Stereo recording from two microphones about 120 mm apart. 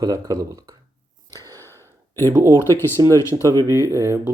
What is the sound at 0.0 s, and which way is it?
Speech, 30° right (ahead or behind).